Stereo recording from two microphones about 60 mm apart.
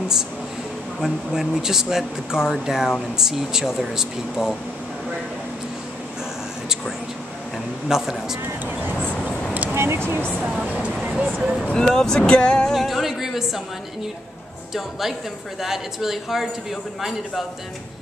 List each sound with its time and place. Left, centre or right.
1.0 s speech: centre
7.9 s speech: centre
9.5 s vehicle: right
9.8 s speech: right
10.6 s speech: right
11.7 s speech: centre
14.7 s speech: centre